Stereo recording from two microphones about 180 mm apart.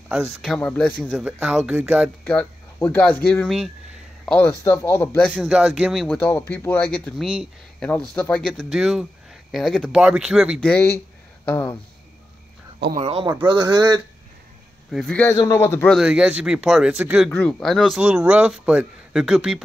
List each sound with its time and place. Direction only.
0.1 s speech: centre (ahead or behind)
2.2 s speech: 10° left (ahead or behind)
5.3 s speech: 5° right (ahead or behind)
6.0 s speech: 10° left (ahead or behind); by 10.6 s 5° right (ahead or behind)
10.6 s speech: 10° left (ahead or behind)
13.0 s speech: 30° right (ahead or behind)
14.9 s speech: 5° left (ahead or behind)
15.3 s speech: 20° left (ahead or behind)
15.9 s speech: 5° right (ahead or behind)
17.3 s speech: 5° left (ahead or behind)